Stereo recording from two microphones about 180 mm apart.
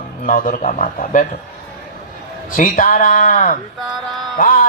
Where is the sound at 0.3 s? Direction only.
50° left (ahead or behind).